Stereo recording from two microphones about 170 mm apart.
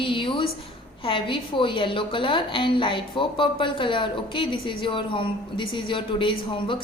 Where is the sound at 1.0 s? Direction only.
30° left (ahead or behind).